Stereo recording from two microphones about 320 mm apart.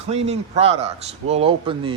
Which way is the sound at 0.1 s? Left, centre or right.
Centre.